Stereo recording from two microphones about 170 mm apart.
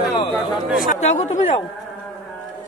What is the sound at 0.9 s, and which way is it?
Speech, 40° left (ahead or behind).